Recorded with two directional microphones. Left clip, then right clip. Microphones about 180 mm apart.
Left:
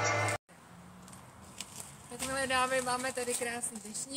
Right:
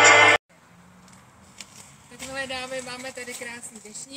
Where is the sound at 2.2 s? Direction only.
5° left (ahead or behind).